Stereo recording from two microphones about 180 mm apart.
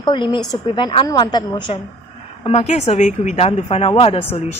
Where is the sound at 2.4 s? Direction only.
35° left (ahead or behind).